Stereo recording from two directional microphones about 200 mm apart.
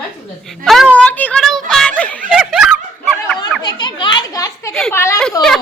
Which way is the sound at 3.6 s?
20° left (ahead or behind).